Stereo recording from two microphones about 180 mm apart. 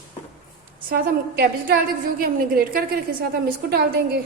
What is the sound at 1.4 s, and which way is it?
A woman's voice, 60° right (ahead or behind).